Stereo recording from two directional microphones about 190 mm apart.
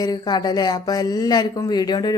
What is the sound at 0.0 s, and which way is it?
Speech, 20° left (ahead or behind).